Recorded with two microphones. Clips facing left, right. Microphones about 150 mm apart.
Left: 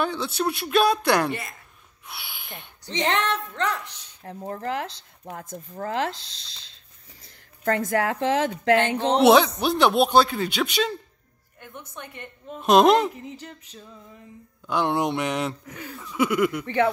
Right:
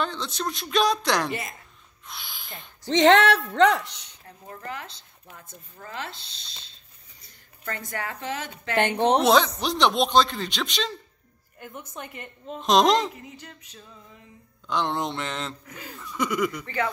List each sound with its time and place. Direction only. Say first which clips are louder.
0.0 s a man's voice: left 4 dB; 10° left (ahead or behind)
2.0 s a sound: left 1 dB; 10° left (ahead or behind)
2.9 s speech: right 7 dB; 80° right
4.2 s speech: left 10 dB; 45° left (ahead or behind)
4.6 s speech: left 6 dB; 65° left (ahead or behind)
5.4 s speech: left 14 dB; 45° left (ahead or behind)
8.0 s speech: left 10 dB; 90° left
8.7 s speech: right 3 dB; 60° right (ahead or behind)
9.2 s a man's voice: left 4 dB; 5° left (ahead or behind)
12.0 s a woman's voice: right 1 dB; 5° right (ahead or behind)
12.5 s a man's voice: left 3 dB; 5° left (ahead or behind)
14.7 s a man's voice: left 4 dB; 10° left (ahead or behind)
16.0 s a sound: left 4 dB; 5° left (ahead or behind)
16.6 s speech: left 6 dB; 60° left (ahead or behind)